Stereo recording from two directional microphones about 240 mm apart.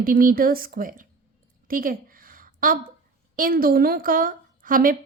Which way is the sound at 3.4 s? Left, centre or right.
Right.